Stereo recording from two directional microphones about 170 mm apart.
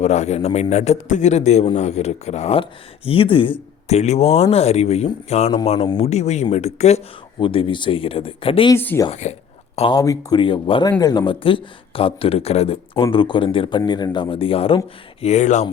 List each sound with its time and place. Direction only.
0.0 s speech: 40° left (ahead or behind)
8.7 s speech: 15° left (ahead or behind)
9.0 s speech: 40° left (ahead or behind)
9.9 s speech: 20° left (ahead or behind); by 15.6 s 45° left (ahead or behind)